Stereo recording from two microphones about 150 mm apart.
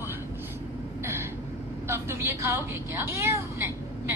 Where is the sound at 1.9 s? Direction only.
15° right (ahead or behind).